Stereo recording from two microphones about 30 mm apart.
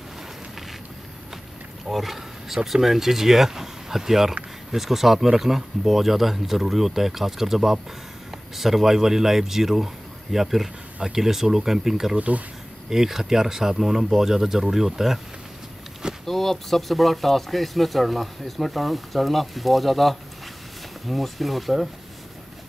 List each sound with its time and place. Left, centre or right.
1.9 s speech: centre
12.2 s speech: right
12.9 s speech: centre
16.3 s speech: centre